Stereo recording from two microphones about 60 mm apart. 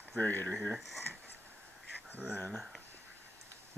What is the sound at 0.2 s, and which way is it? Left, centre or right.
Speech, left.